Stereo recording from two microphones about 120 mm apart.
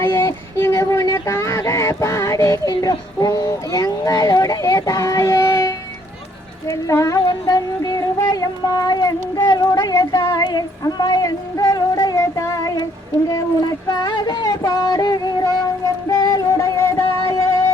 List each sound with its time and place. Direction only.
0.0 s a sound: 20° left (ahead or behind)
6.7 s a woman's voice: 25° left (ahead or behind)
7.3 s a sound: 30° left (ahead or behind)
10.2 s music: 25° left (ahead or behind)
10.4 s music: 35° left (ahead or behind)
13.9 s child singing: 35° left (ahead or behind)
16.0 s music: 30° left (ahead or behind)